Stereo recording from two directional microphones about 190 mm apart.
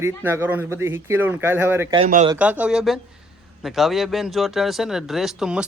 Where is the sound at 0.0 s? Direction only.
15° right (ahead or behind).